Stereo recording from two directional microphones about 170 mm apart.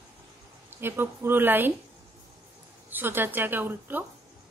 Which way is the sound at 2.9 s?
10° right (ahead or behind).